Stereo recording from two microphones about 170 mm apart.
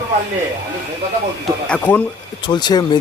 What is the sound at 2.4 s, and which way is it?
Speech, 25° left (ahead or behind).